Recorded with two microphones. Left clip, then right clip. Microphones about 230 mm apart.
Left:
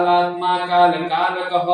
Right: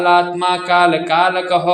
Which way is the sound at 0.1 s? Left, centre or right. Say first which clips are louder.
Right 3 dB; right.